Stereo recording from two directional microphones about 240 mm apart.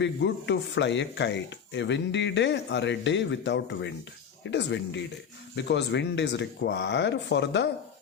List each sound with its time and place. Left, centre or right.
0.0 s speech: left